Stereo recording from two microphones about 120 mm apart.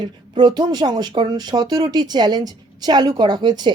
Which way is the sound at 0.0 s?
35° right (ahead or behind).